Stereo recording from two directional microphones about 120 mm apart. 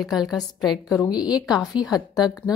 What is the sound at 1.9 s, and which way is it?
Speech, 30° left (ahead or behind).